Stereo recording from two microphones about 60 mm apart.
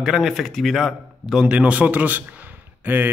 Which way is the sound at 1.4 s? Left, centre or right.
Centre.